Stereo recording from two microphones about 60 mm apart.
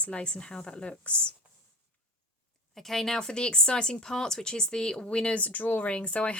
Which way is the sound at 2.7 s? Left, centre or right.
Centre.